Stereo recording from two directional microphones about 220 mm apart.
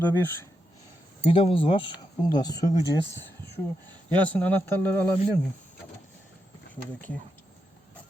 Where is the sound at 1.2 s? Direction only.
25° left (ahead or behind).